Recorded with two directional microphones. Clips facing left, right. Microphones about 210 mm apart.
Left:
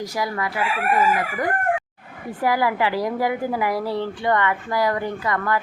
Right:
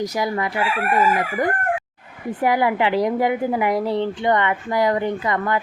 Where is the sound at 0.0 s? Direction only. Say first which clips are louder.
Right 3 dB; 20° right (ahead or behind).